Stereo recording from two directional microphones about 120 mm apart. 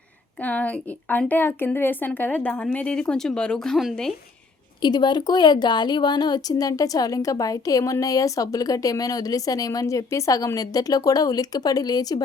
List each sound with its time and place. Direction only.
0.4 s speech: 10° left (ahead or behind)
4.8 s a woman's voice: 35° left (ahead or behind)